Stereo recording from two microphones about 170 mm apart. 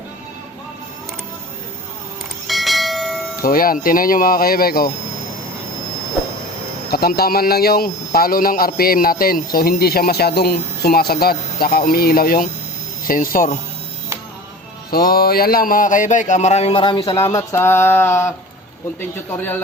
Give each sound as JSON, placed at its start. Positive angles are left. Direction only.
{"t": 2.5, "sound": "bell", "side_deg": 0}
{"t": 3.4, "sound": "a man's voice", "side_deg": 60}
{"t": 6.9, "sound": "a man's voice", "side_deg": 65}
{"t": 14.8, "sound": "music", "side_deg": 65}
{"t": 17.3, "sound": "a sound", "side_deg": 15}